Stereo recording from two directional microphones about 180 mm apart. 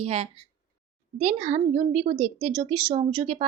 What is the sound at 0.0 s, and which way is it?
Speech, 35° right (ahead or behind).